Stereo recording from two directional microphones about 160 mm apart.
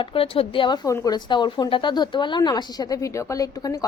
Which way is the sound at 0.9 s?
20° left (ahead or behind).